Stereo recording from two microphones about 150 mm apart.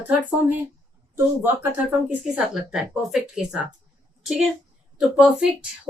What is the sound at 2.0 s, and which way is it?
A woman's voice, 10° right (ahead or behind).